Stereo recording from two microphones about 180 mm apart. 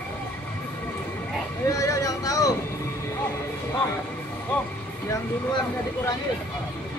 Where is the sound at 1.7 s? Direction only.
20° left (ahead or behind).